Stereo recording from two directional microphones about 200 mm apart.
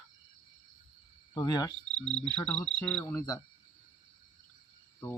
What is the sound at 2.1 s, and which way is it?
Cricket, 5° left (ahead or behind).